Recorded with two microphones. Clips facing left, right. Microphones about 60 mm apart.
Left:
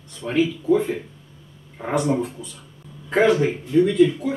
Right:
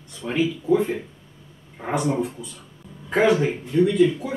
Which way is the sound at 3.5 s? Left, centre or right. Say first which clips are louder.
Left 2 dB; centre.